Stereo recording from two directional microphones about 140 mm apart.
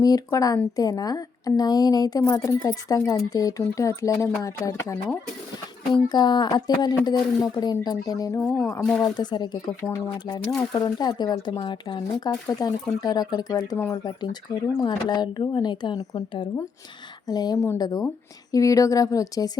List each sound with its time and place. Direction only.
0.0 s a woman's voice: 25° left (ahead or behind)
8.4 s speech: 5° left (ahead or behind)
9.1 s a woman's voice: 30° left (ahead or behind)